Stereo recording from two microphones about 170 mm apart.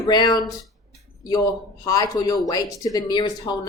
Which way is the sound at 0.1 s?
25° left (ahead or behind).